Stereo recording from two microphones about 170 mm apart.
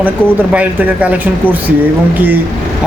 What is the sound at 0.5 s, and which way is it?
Speech, 10° right (ahead or behind).